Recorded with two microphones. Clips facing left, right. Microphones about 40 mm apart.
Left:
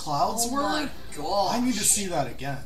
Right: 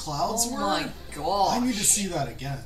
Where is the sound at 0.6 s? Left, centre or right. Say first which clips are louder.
Even; right.